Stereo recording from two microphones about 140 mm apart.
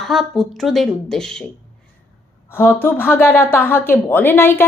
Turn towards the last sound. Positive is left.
turn(degrees=15)  # may be behind; listen again after turning